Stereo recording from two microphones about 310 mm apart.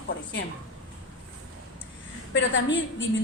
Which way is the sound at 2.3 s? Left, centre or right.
Left.